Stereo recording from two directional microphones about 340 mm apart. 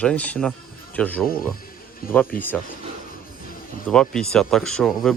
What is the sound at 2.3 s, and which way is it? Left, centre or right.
Speech, left.